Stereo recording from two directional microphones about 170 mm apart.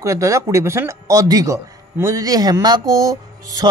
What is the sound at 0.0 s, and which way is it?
A man's voice, 20° right (ahead or behind).